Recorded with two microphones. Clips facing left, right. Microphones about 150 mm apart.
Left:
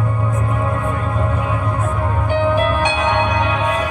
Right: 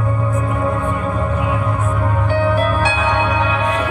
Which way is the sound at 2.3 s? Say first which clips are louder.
Left 1 dB; 15° left (ahead or behind).